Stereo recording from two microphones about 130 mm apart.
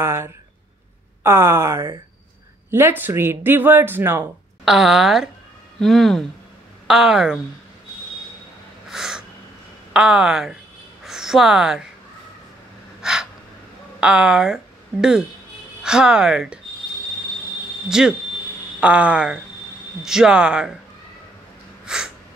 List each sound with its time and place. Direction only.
0.0 s speech: 20° right (ahead or behind)
4.6 s speech: centre (ahead or behind)
8.9 s owl: 5° right (ahead or behind)
9.9 s speech: 5° right (ahead or behind)
13.0 s gasp: 5° right (ahead or behind)
13.9 s speech: 5° right (ahead or behind)
17.8 s speech: 5° right (ahead or behind)
21.8 s a sound: 5° right (ahead or behind)